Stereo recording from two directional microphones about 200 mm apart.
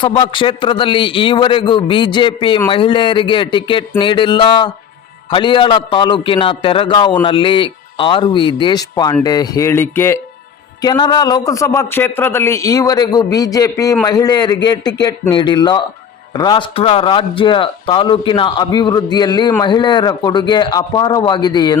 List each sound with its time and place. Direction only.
0.0 s a man's voice: 25° left (ahead or behind)